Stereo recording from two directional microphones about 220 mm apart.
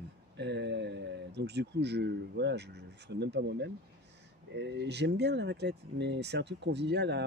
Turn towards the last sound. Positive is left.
turn(degrees=-50)  # may be behind; listen again after turning